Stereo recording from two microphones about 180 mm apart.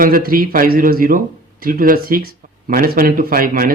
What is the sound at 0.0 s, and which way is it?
Speech, 50° right (ahead or behind).